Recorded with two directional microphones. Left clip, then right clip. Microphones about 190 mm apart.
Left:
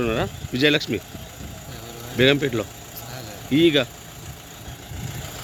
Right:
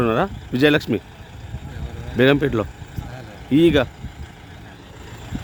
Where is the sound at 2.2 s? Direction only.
45° right (ahead or behind).